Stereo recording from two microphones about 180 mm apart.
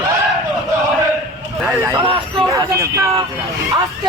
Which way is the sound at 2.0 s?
30° right (ahead or behind).